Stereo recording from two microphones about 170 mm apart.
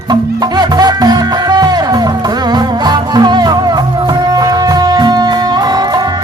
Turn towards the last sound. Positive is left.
turn(degrees=-25)  # may be behind; listen again after turning